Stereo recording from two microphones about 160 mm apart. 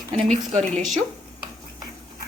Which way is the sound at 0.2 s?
45° right (ahead or behind).